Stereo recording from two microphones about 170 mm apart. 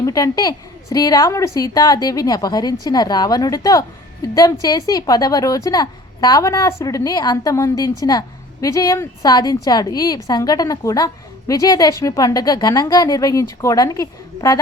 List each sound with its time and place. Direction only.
0.0 s a woman's voice: 20° left (ahead or behind)